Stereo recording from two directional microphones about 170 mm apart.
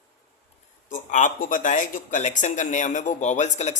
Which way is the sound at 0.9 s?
50° left (ahead or behind).